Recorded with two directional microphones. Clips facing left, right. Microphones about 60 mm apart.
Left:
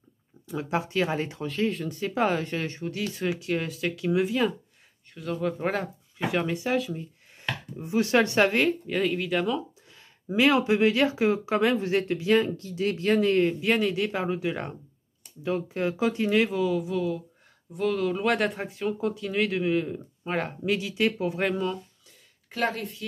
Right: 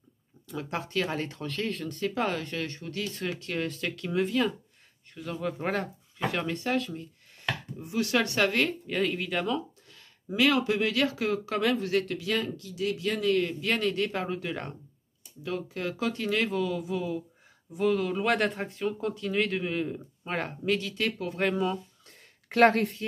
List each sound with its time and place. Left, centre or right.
0.5 s speech: centre
3.0 s speech: centre
7.3 s speech: left
8.8 s speech: centre
9.8 s speech: centre
15.4 s speech: left
21.4 s speech: centre
22.5 s speech: right